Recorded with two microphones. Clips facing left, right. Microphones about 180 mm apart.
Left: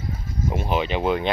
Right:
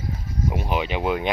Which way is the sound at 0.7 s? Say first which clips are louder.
Left 3 dB; 10° right (ahead or behind).